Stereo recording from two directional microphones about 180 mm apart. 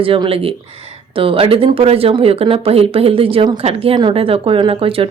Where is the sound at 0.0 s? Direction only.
30° right (ahead or behind).